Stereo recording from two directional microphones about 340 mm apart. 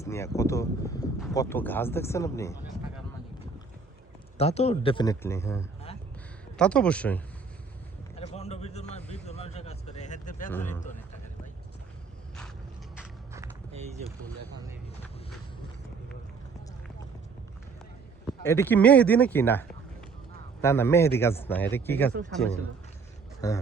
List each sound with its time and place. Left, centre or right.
0.0 s speech: centre
4.4 s speech: centre
8.1 s speech: centre
13.0 s walk: centre
18.3 s speech: centre
23.4 s speech: centre